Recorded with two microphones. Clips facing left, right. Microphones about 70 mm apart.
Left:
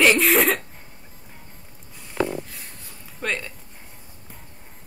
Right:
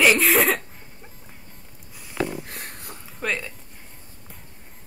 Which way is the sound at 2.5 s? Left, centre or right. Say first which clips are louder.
Right 5 dB; right.